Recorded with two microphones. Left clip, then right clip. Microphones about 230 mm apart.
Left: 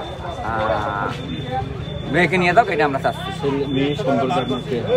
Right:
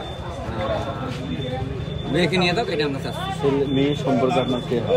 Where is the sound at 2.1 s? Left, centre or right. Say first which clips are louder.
Left 6 dB; centre.